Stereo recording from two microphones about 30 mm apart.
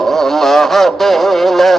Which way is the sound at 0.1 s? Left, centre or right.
Centre.